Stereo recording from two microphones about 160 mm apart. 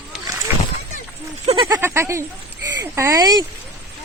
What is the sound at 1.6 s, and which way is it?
Speech, 15° right (ahead or behind).